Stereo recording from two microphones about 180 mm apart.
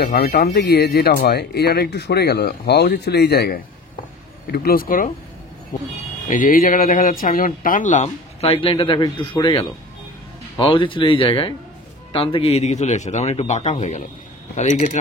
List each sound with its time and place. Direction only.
0.0 s speech: 60° left (ahead or behind); by 15.0 s 40° left (ahead or behind)